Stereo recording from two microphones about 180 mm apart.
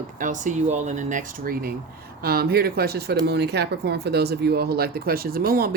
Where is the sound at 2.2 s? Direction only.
60° right (ahead or behind).